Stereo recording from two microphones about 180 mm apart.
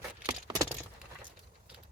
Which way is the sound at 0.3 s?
20° right (ahead or behind).